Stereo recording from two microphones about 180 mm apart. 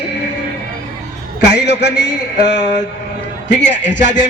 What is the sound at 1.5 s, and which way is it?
Speech, 70° left (ahead or behind).